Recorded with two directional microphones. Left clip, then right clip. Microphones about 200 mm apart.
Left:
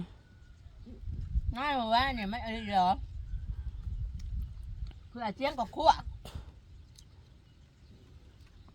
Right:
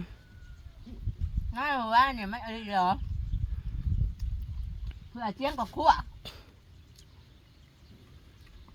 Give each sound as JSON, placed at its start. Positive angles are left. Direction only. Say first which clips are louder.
{"t": 1.5, "sound": "a woman's voice", "louder": "right 4 dB", "side_deg": 15}
{"t": 5.1, "sound": "speech", "louder": "right 1 dB", "side_deg": 15}